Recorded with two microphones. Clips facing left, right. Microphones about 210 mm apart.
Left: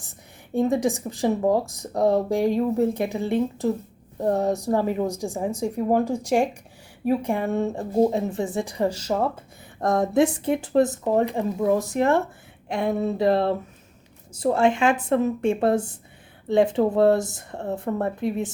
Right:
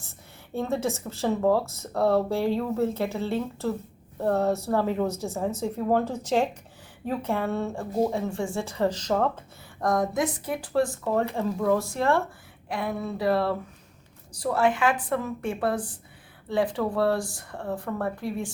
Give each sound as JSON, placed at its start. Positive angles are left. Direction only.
{"t": 0.0, "sound": "speech", "side_deg": 15}
{"t": 9.8, "sound": "speech", "side_deg": 25}